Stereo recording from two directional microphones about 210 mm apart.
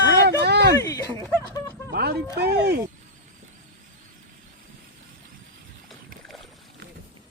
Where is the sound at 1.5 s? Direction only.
15° left (ahead or behind).